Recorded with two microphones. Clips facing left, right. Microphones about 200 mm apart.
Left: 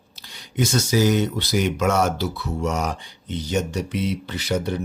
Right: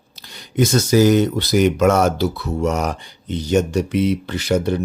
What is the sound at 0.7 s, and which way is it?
Speech, 45° right (ahead or behind).